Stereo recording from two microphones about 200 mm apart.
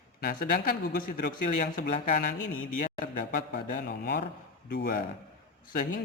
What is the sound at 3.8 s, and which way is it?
Speech, 60° left (ahead or behind).